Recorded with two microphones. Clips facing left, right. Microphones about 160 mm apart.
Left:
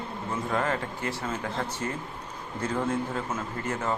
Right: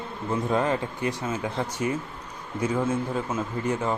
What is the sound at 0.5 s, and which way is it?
Speech, 15° right (ahead or behind).